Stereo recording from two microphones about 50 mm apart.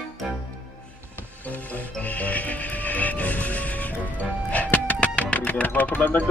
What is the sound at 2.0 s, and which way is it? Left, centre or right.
Music, left.